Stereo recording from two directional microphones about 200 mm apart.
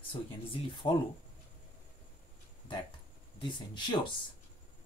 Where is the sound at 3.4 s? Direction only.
25° left (ahead or behind).